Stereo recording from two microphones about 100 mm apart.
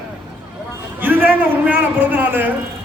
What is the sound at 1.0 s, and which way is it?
A man's voice, 20° right (ahead or behind).